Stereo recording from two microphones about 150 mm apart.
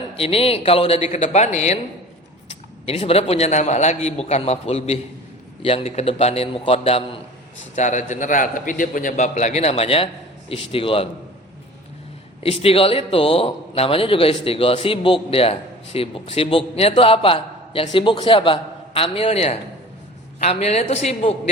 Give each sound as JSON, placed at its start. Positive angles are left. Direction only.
{"t": 0.2, "sound": "a man's voice", "side_deg": 40}
{"t": 7.8, "sound": "a man's voice", "side_deg": 55}
{"t": 12.4, "sound": "a man's voice", "side_deg": 40}